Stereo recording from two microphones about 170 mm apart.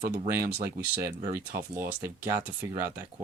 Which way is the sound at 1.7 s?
15° right (ahead or behind).